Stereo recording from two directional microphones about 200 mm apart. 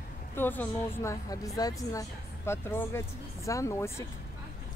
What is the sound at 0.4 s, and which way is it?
Speech, 10° left (ahead or behind).